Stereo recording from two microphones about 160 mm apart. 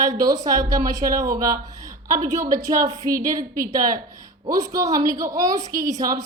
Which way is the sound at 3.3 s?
60° right (ahead or behind).